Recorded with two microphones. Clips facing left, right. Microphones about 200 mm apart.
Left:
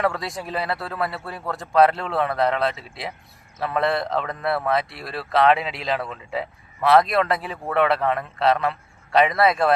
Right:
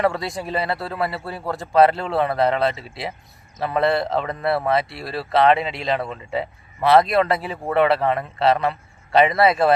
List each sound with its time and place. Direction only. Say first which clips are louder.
0.0 s speech: right 3 dB; centre (ahead or behind)